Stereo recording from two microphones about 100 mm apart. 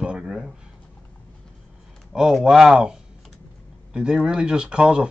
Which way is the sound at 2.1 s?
5° right (ahead or behind).